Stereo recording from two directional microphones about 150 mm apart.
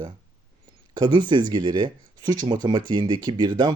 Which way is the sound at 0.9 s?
30° right (ahead or behind).